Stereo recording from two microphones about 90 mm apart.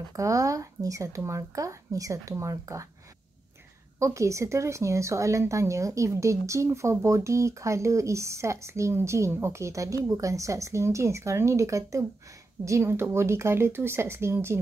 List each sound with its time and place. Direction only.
0.1 s speech: 40° right (ahead or behind)
4.0 s speech: 35° right (ahead or behind)